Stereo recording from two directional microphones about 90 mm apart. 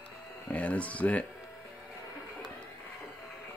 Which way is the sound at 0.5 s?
15° left (ahead or behind).